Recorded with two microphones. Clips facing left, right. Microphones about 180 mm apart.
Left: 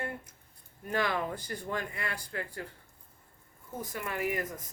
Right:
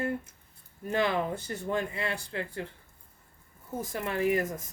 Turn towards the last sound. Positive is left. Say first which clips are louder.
# right 6 dB
turn(degrees=-25)  # may be behind; listen again after turning